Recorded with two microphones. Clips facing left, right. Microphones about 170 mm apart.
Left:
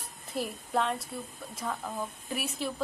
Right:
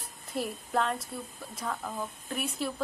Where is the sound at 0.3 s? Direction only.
Centre (ahead or behind).